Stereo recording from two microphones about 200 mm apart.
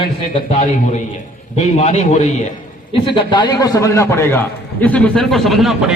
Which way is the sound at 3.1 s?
25° left (ahead or behind).